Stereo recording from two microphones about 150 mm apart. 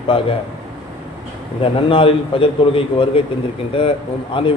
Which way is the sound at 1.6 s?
35° left (ahead or behind).